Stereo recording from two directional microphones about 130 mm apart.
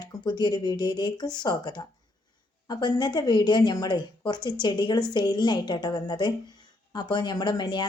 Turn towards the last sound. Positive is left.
turn(degrees=35)  # may be behind; listen again after turning